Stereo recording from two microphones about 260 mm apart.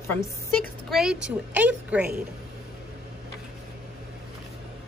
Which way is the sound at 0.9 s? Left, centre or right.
Centre.